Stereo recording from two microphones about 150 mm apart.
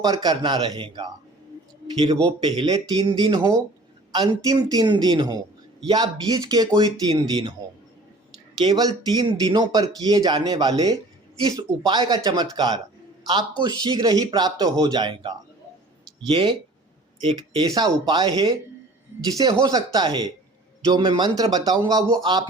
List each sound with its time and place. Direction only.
0.0 s speech: 25° right (ahead or behind)
2.2 s speech: 30° right (ahead or behind)
8.5 s speech: 30° right (ahead or behind)